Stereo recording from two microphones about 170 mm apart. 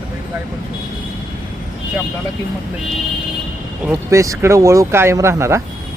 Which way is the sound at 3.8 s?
15° right (ahead or behind).